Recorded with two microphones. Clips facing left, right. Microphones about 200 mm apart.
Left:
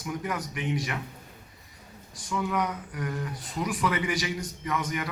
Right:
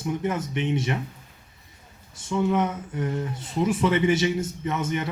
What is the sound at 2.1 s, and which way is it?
Speech, 25° right (ahead or behind).